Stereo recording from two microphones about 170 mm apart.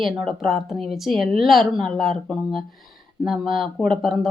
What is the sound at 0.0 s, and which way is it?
Speech, centre (ahead or behind).